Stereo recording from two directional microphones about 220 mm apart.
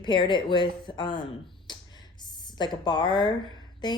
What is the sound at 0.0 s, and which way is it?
A woman's voice, 20° left (ahead or behind).